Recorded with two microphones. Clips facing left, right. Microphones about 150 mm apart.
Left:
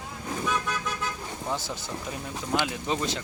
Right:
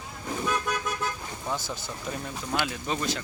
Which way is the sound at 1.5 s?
25° left (ahead or behind).